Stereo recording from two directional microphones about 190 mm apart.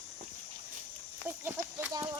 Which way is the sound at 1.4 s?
15° right (ahead or behind).